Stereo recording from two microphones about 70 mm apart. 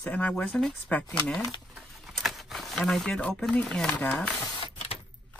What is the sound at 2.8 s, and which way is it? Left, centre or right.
Speech, centre.